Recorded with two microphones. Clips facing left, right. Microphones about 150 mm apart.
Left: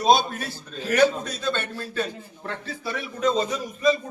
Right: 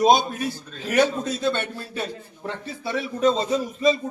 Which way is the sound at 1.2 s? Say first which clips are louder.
Right 4 dB; 25° right (ahead or behind).